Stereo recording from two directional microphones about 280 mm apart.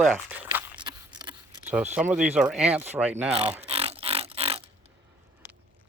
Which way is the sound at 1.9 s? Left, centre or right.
Centre.